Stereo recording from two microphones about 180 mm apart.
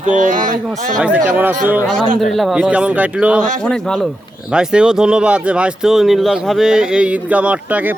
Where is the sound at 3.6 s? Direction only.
5° left (ahead or behind).